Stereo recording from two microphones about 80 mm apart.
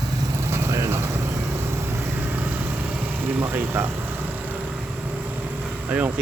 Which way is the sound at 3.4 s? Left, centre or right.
Right.